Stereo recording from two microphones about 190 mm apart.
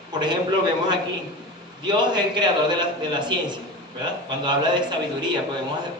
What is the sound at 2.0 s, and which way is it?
A man's voice, 25° right (ahead or behind).